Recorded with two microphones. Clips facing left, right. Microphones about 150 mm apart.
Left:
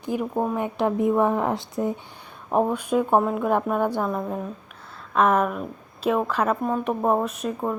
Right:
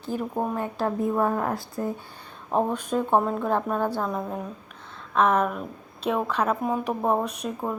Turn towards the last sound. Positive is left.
turn(degrees=0)  # may be behind; listen again after turning